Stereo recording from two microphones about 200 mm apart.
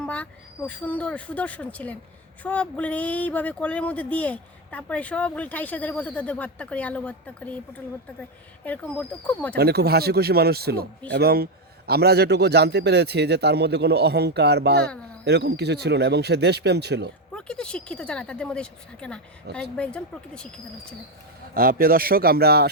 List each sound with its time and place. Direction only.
0.0 s speech: 5° left (ahead or behind)
8.6 s speech: 5° left (ahead or behind)
9.6 s a man's voice: 55° right (ahead or behind)
17.3 s speech: 5° left (ahead or behind)
21.5 s speech: 45° right (ahead or behind)